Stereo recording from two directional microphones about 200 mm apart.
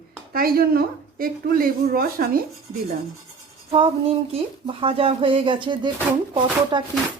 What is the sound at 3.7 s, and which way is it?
Speech, 30° right (ahead or behind).